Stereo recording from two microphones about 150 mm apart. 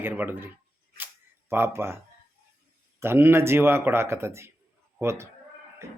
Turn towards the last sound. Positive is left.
turn(degrees=-15)  # may be behind; listen again after turning